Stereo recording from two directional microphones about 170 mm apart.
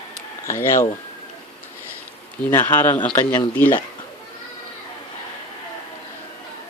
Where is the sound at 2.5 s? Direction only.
10° left (ahead or behind).